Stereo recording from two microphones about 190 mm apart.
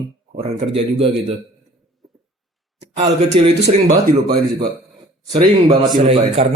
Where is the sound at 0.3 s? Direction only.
30° right (ahead or behind).